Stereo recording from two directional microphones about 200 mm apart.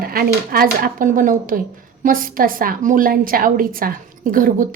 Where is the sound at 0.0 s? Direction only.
45° right (ahead or behind).